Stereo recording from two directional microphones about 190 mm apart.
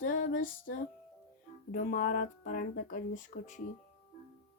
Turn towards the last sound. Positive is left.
turn(degrees=40)  # may be behind; listen again after turning